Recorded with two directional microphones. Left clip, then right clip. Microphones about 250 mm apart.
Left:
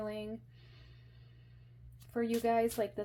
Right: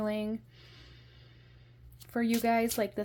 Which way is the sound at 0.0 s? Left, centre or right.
Right.